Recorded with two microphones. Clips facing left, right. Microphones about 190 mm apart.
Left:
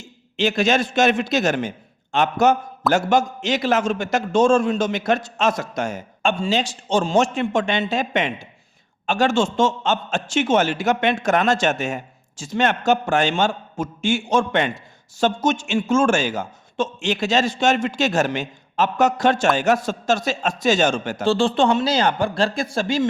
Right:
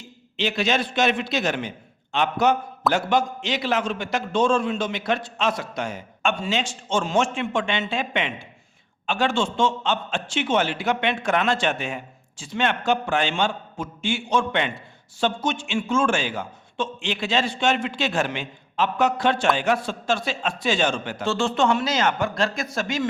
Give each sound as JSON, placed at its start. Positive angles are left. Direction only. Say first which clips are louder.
{"t": 0.0, "sound": "a man's voice", "louder": "left 5 dB", "side_deg": 45}
{"t": 6.3, "sound": "a man's voice", "louder": "left 4 dB", "side_deg": 30}